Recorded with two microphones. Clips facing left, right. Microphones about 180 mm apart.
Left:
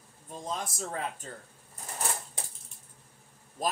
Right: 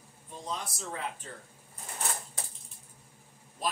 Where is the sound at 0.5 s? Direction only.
50° left (ahead or behind).